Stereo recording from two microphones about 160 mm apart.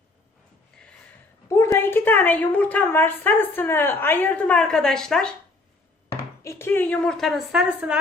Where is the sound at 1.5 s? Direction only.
20° left (ahead or behind).